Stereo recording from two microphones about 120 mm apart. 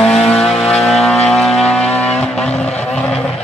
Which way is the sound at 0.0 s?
5° left (ahead or behind).